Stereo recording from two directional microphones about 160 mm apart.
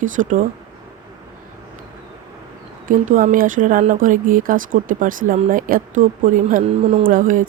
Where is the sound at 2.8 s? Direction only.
55° right (ahead or behind).